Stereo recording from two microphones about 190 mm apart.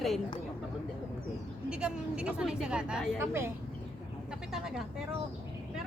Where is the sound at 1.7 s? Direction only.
5° right (ahead or behind).